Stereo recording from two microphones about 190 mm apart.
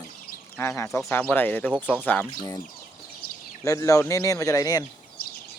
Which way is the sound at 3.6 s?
15° left (ahead or behind).